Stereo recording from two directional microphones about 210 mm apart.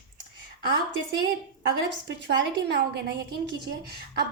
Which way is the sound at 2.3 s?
55° right (ahead or behind).